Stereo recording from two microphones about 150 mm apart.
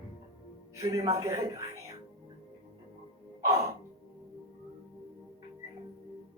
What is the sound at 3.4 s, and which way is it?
Speech, 20° right (ahead or behind).